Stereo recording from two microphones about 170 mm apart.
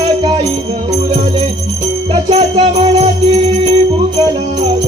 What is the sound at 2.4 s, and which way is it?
Music, 30° right (ahead or behind).